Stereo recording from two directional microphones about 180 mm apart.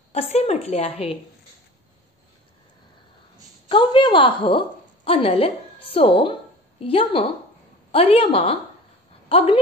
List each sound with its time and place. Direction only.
0.1 s a woman's voice: 35° left (ahead or behind)
3.6 s a woman's voice: 30° left (ahead or behind)